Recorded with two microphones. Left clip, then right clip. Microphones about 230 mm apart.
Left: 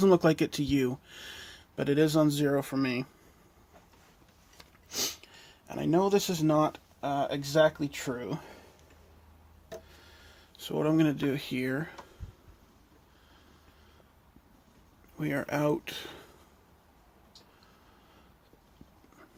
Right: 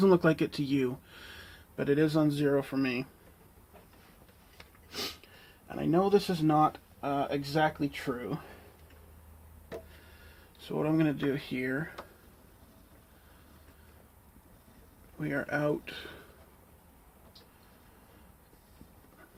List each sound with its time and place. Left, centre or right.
0.0 s speech: left
4.5 s speech: left
10.7 s speech: left
15.2 s speech: left